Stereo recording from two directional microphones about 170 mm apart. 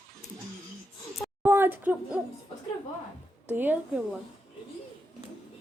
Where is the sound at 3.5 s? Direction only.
10° right (ahead or behind).